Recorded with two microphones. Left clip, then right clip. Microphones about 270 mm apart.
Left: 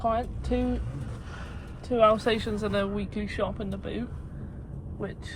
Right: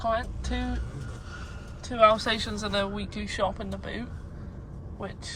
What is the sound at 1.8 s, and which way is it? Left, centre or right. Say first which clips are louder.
Speech: right 1 dB; centre.